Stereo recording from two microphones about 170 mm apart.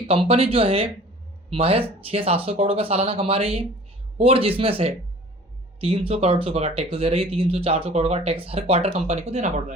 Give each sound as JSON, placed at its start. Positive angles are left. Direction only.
{"t": 0.1, "sound": "speech", "side_deg": -35}